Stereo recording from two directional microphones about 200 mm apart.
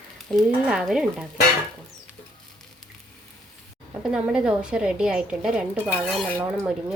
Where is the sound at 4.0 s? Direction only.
5° right (ahead or behind).